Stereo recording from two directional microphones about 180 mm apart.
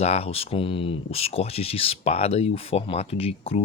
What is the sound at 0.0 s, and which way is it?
Speech, 35° left (ahead or behind).